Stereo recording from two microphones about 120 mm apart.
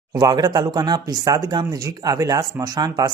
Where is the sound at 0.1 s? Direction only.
35° right (ahead or behind).